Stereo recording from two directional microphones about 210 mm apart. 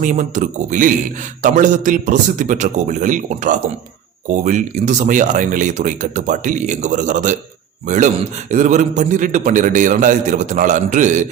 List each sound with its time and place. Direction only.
0.0 s a man's voice: 35° right (ahead or behind)